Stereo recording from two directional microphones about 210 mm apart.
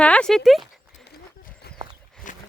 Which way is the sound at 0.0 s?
5° left (ahead or behind).